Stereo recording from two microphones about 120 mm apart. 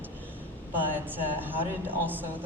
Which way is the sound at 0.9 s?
15° right (ahead or behind).